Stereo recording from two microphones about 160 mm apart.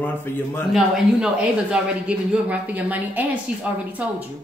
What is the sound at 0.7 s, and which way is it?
Speech, 5° right (ahead or behind).